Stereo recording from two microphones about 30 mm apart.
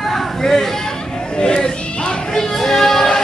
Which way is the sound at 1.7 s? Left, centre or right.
Left.